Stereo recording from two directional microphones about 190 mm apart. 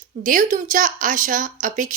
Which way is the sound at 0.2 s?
45° right (ahead or behind).